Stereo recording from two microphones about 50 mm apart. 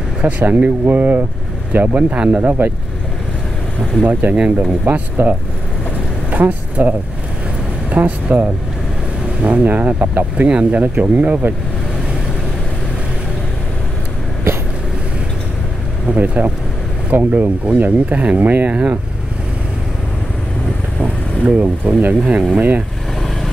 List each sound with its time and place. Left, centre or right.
0.2 s speech: right
2.1 s speech: right
2.4 s speech: right
4.0 s speech: right
6.3 s speech: right
16.1 s speech: right
21.0 s speech: right